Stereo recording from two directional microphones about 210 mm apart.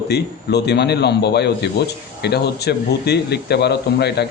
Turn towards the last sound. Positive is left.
turn(degrees=50)  # may be behind; listen again after turning